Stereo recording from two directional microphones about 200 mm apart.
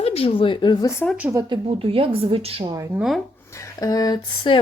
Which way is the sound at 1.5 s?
30° right (ahead or behind).